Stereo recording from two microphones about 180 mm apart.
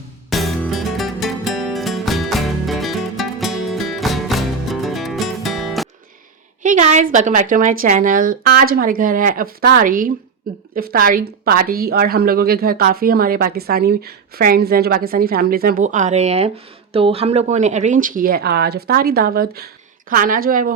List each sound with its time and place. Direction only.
0.3 s music: centre (ahead or behind)
6.6 s a woman's voice: 45° right (ahead or behind)